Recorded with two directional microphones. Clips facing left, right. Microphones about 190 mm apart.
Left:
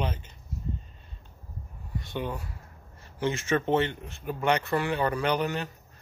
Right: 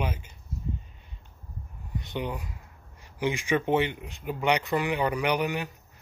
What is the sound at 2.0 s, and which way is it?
Speech, 20° right (ahead or behind).